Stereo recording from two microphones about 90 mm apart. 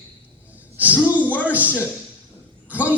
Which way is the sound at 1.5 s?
20° right (ahead or behind).